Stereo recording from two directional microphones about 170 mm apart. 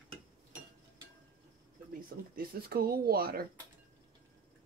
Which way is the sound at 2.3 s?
65° right (ahead or behind).